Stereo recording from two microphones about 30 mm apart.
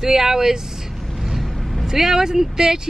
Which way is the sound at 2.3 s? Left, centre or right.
Centre.